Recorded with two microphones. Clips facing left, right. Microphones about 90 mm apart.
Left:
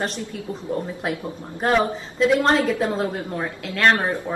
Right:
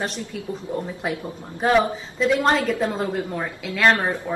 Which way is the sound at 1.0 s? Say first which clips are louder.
Left 1 dB; centre (ahead or behind).